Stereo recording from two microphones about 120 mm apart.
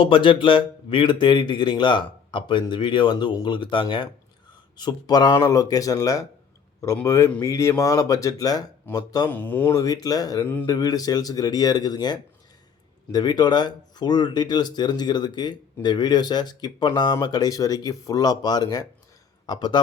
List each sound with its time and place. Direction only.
0.0 s speech: 45° left (ahead or behind)
9.3 s speech: 15° left (ahead or behind)
9.7 s speech: 30° left (ahead or behind)
10.4 s speech: 15° left (ahead or behind)
10.7 s speech: 30° left (ahead or behind)